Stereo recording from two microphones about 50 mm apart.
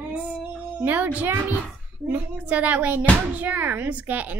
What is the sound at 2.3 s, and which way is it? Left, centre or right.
A child's voice, right.